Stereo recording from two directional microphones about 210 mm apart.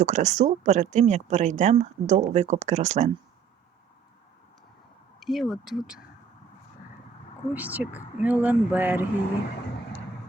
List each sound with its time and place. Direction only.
0.0 s speech: 35° right (ahead or behind)
5.2 s speech: centre (ahead or behind)
7.5 s speech: 10° right (ahead or behind)